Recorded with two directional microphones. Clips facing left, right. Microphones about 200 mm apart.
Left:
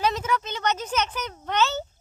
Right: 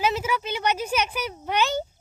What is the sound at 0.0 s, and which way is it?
Speech, 5° right (ahead or behind).